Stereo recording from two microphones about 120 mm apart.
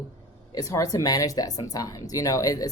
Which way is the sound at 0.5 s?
30° left (ahead or behind).